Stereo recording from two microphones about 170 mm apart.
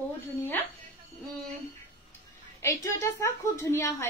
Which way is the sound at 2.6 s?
20° left (ahead or behind).